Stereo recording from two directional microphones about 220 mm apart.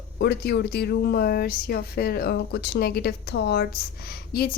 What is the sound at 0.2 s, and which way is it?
A woman's voice, 50° left (ahead or behind).